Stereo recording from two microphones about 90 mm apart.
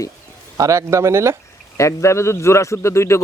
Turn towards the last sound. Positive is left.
turn(degrees=35)  # may be behind; listen again after turning